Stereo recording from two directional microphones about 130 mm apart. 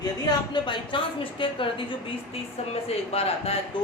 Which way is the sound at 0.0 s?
35° left (ahead or behind).